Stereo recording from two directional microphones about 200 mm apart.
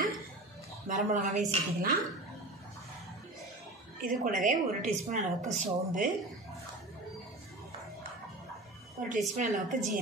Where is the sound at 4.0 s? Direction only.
40° right (ahead or behind).